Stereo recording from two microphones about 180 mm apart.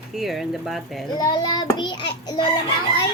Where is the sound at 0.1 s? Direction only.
Centre (ahead or behind).